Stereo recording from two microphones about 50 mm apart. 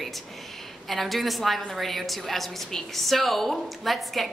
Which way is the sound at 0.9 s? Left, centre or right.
Centre.